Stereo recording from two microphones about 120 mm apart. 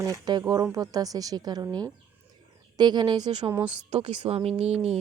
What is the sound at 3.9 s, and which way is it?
Speech, 65° right (ahead or behind).